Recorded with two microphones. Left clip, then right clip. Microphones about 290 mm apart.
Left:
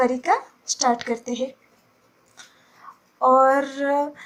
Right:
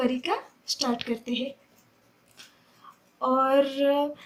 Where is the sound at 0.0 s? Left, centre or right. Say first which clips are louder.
Left 7 dB; centre.